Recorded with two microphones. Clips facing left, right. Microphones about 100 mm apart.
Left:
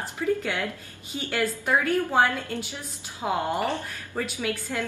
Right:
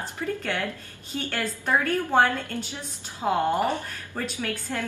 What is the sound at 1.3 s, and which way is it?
A woman's voice, 10° left (ahead or behind).